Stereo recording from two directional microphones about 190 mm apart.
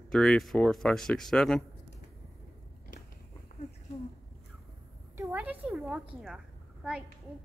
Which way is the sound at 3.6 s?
35° left (ahead or behind).